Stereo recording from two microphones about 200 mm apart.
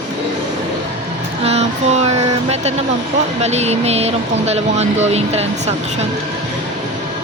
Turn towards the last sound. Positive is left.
turn(degrees=-30)  # may be behind; listen again after turning